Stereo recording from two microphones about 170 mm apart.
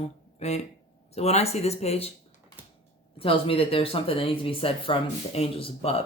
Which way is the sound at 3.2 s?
35° left (ahead or behind).